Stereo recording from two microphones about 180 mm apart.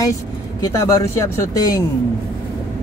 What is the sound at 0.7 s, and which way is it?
Speech, 20° left (ahead or behind).